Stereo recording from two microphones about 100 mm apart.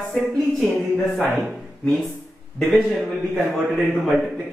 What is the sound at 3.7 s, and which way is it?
Speech, centre (ahead or behind).